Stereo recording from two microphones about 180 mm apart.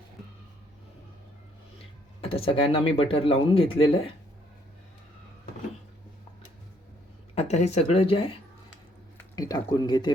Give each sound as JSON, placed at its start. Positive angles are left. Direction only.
{"t": 2.2, "sound": "speech", "side_deg": 30}
{"t": 7.3, "sound": "speech", "side_deg": 40}
{"t": 9.3, "sound": "speech", "side_deg": 20}